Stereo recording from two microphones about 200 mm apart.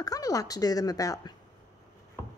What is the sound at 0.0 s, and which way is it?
A woman's voice, 20° left (ahead or behind).